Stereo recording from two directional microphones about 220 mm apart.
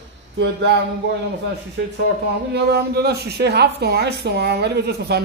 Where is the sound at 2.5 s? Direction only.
45° right (ahead or behind).